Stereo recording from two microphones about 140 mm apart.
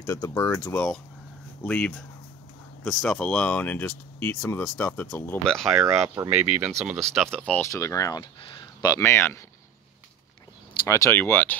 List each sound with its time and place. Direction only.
0.0 s speech: 20° left (ahead or behind)
5.8 s speech: 20° right (ahead or behind)
7.2 s speech: 5° left (ahead or behind)
7.7 s speech: 25° left (ahead or behind)
8.2 s speech: 35° left (ahead or behind); by 9.4 s 15° left (ahead or behind)
10.9 s speech: 20° left (ahead or behind)